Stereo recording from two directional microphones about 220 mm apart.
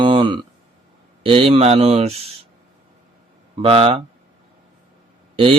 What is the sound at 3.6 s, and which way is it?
Speech, 25° right (ahead or behind).